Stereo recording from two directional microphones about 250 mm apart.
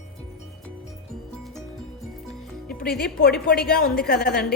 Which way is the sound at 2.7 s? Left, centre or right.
Left.